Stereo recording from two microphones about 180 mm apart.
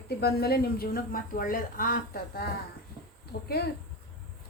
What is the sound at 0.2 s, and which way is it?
A woman's voice, 60° left (ahead or behind).